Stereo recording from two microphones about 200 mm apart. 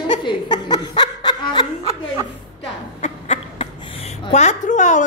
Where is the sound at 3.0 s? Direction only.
35° left (ahead or behind).